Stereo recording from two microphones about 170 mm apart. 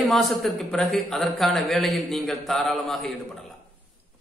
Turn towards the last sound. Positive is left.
turn(degrees=0)  # may be behind; listen again after turning